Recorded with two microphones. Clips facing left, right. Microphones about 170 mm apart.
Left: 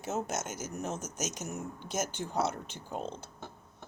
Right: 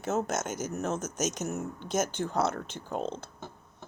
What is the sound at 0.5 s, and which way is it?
Speech, 10° left (ahead or behind).